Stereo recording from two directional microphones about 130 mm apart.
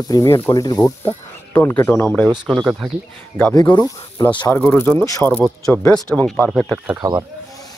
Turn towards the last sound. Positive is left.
turn(degrees=-25)  # may be behind; listen again after turning